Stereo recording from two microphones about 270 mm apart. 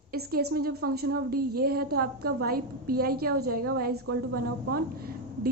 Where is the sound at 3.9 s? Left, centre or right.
Right.